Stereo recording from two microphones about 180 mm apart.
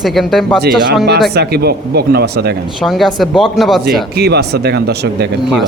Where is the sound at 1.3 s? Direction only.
65° right (ahead or behind).